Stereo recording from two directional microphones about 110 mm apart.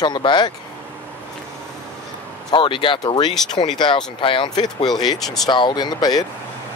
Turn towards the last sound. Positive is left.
turn(degrees=35)  # may be behind; listen again after turning